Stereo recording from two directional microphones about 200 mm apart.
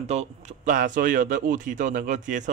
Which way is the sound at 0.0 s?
35° right (ahead or behind).